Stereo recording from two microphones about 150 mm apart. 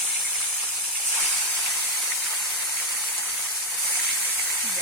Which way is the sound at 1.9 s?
Centre (ahead or behind).